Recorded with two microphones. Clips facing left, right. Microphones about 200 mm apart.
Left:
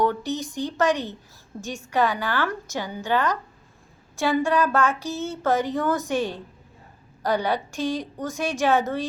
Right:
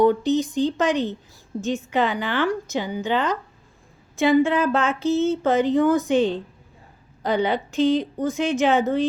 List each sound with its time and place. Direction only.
0.0 s a woman's voice: 20° right (ahead or behind)